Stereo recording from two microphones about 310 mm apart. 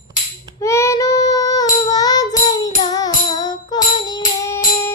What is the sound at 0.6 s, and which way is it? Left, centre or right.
Child singing, centre.